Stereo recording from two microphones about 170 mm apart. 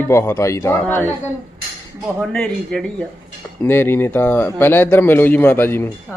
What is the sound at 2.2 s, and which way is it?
A woman's voice, 5° left (ahead or behind).